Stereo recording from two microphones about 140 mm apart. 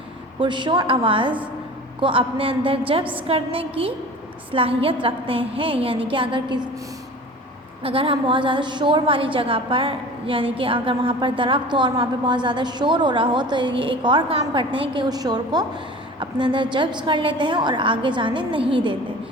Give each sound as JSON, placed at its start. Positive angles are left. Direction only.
{"t": 0.3, "sound": "a woman's voice", "side_deg": -35}
{"t": 7.9, "sound": "a woman's voice", "side_deg": -40}